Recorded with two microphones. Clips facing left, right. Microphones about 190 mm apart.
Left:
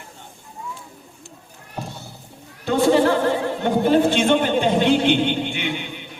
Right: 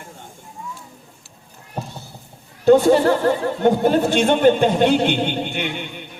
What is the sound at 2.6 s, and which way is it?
A man's voice, 50° right (ahead or behind).